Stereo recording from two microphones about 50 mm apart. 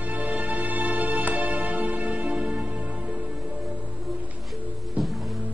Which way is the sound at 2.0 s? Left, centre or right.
Centre.